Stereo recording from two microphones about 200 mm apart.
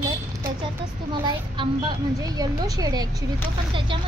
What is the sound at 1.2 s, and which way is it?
A woman's voice, 25° right (ahead or behind).